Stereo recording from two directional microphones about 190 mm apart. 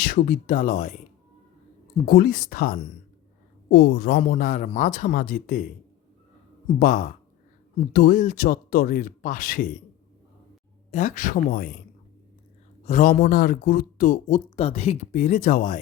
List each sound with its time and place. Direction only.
0.0 s a man's voice: 50° left (ahead or behind)
2.0 s a man's voice: 50° left (ahead or behind)
6.7 s a man's voice: 45° left (ahead or behind)
10.9 s a man's voice: 40° left (ahead or behind)
12.8 s a man's voice: 40° left (ahead or behind)
14.5 s speech: 30° left (ahead or behind)